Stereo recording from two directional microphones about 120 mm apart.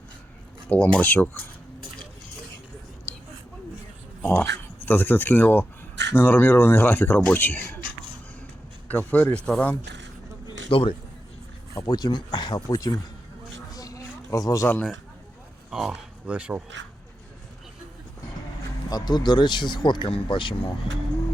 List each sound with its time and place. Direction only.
0.7 s speech: 10° left (ahead or behind)
4.2 s speech: 15° left (ahead or behind)
8.9 s speech: 15° left (ahead or behind)
10.7 s a man's voice: 50° left (ahead or behind)
11.7 s speech: 35° left (ahead or behind)
13.7 s a sound: 30° left (ahead or behind)
15.7 s speech: 5° right (ahead or behind)
18.9 s speech: 35° left (ahead or behind)